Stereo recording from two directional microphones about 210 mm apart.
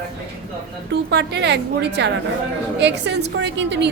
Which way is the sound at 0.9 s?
55° right (ahead or behind).